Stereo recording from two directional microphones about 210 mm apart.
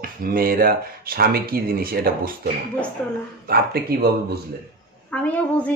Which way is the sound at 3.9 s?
50° right (ahead or behind).